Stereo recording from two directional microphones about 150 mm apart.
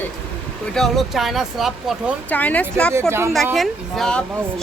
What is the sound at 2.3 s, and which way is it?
Speech, 10° left (ahead or behind).